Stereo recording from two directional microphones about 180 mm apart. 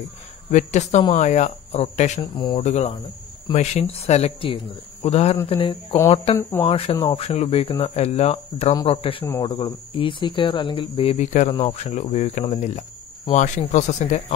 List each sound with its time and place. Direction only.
0.5 s speech: 40° left (ahead or behind)
2.3 s speech: 25° left (ahead or behind)
2.6 s speech: 40° left (ahead or behind)
6.3 s speech: 15° left (ahead or behind)
6.7 s speech: 30° left (ahead or behind)
9.2 s speech: 20° left (ahead or behind); by 14.2 s 40° left (ahead or behind)